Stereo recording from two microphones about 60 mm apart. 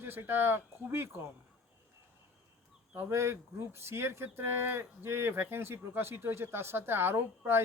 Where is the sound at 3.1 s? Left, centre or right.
Right.